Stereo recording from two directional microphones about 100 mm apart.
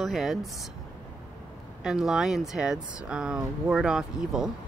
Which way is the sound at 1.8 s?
5° right (ahead or behind).